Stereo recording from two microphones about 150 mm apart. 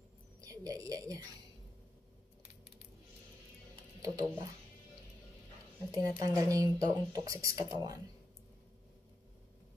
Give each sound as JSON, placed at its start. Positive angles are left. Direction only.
{"t": 0.4, "sound": "a woman's voice", "side_deg": -25}
{"t": 4.0, "sound": "speech", "side_deg": -20}
{"t": 5.9, "sound": "speech", "side_deg": -25}